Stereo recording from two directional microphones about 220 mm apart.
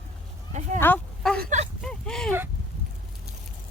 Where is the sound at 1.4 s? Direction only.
35° right (ahead or behind).